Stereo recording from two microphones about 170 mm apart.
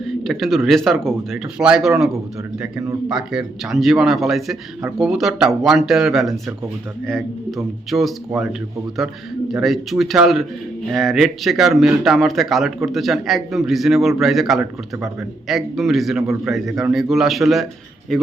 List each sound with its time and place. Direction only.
0.0 s a man's voice: centre (ahead or behind)
3.1 s a man's voice: centre (ahead or behind)
9.5 s a man's voice: centre (ahead or behind)